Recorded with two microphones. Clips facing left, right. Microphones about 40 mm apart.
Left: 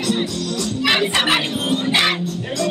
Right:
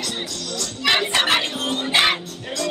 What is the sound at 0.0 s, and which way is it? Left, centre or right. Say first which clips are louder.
Speech: left 7 dB; centre.